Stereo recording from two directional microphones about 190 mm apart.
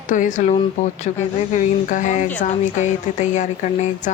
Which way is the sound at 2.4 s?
35° left (ahead or behind).